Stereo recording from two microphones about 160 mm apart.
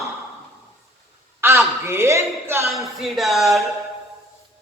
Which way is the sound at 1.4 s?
15° right (ahead or behind).